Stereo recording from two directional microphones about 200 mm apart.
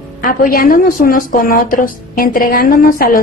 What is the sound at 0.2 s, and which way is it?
A woman's voice, 45° left (ahead or behind).